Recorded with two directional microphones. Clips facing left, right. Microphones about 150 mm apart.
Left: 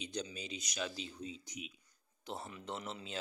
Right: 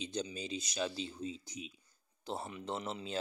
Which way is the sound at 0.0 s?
30° right (ahead or behind).